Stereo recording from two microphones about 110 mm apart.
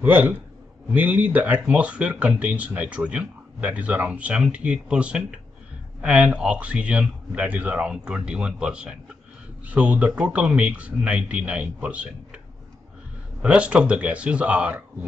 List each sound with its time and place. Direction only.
0.0 s speech: 15° right (ahead or behind)
13.4 s speech: 10° right (ahead or behind)